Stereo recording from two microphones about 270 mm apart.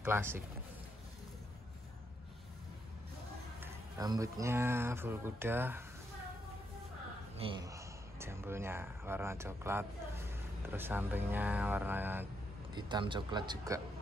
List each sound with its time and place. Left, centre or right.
0.0 s speech: centre
3.6 s speech: centre
7.3 s speech: centre